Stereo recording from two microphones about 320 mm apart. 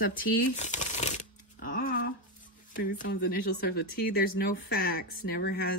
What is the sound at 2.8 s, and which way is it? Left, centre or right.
Speech, left.